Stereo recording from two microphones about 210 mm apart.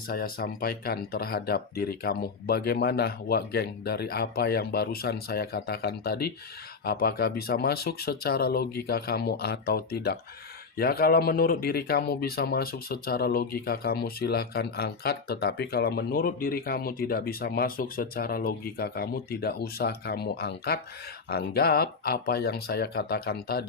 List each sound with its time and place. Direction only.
0.1 s speech: 45° left (ahead or behind)